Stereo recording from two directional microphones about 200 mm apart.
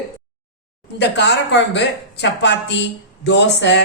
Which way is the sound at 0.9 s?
60° left (ahead or behind).